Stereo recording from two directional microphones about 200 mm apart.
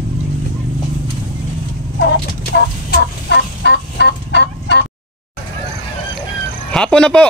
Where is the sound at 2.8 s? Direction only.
55° left (ahead or behind).